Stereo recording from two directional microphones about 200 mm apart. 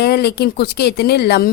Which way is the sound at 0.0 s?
55° left (ahead or behind).